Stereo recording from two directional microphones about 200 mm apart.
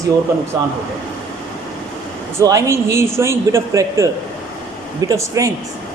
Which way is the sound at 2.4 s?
15° right (ahead or behind).